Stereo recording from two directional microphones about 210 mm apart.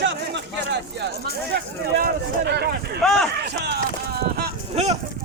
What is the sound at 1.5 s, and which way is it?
Speech, 50° right (ahead or behind).